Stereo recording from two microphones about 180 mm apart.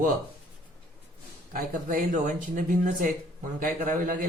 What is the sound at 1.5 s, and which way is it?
Speech, 50° right (ahead or behind).